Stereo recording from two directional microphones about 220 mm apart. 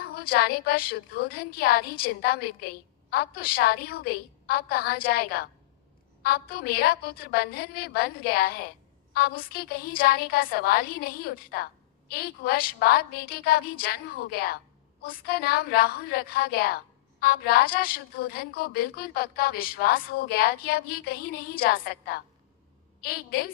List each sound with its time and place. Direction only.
0.1 s a woman's voice: 45° left (ahead or behind)